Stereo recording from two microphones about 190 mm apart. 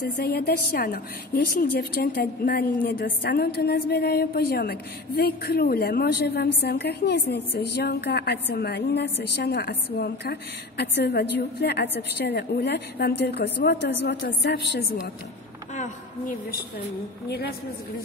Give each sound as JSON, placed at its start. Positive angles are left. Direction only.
{"t": 0.0, "sound": "a woman's voice", "side_deg": 55}
{"t": 15.7, "sound": "speech", "side_deg": 40}